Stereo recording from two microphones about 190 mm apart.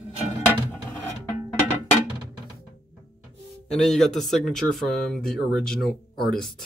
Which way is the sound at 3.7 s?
Centre (ahead or behind).